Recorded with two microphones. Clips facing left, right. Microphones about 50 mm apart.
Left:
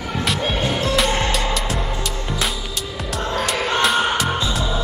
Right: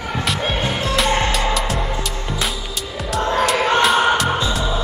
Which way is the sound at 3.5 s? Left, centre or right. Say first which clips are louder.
Right 4 dB; right.